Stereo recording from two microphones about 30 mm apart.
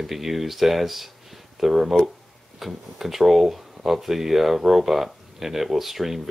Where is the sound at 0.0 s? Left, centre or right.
Centre.